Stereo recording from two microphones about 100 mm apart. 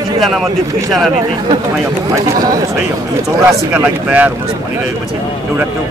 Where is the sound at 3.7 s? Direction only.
15° right (ahead or behind).